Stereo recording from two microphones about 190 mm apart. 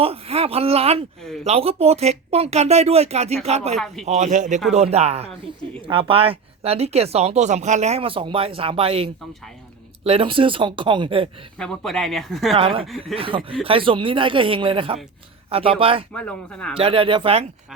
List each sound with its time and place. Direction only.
0.0 s speech: 30° right (ahead or behind)
11.5 s speech: 5° left (ahead or behind)
12.5 s speech: 30° right (ahead or behind)
16.1 s speech: 5° left (ahead or behind)
16.7 s speech: 30° right (ahead or behind)